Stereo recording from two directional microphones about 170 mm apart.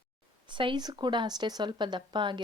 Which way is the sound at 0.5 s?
30° right (ahead or behind).